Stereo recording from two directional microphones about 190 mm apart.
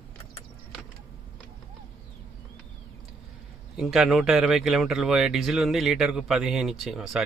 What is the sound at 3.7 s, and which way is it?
Speech, centre (ahead or behind).